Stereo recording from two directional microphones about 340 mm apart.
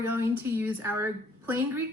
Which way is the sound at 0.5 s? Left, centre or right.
Centre.